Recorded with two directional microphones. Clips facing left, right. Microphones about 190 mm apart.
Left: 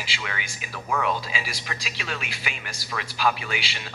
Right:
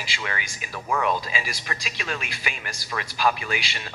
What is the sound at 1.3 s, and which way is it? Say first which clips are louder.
Speech: right 2 dB; 50° right (ahead or behind).